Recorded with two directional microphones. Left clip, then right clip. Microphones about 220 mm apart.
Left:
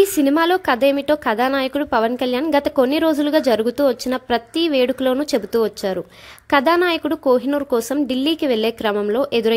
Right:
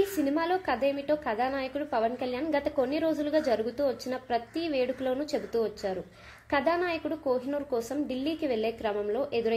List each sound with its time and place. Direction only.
0.2 s a woman's voice: 40° left (ahead or behind)